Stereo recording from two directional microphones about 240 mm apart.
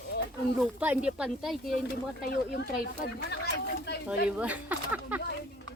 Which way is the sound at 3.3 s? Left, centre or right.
Left.